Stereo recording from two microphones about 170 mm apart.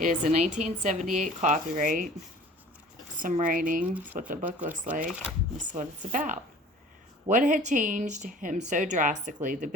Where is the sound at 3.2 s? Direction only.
50° right (ahead or behind).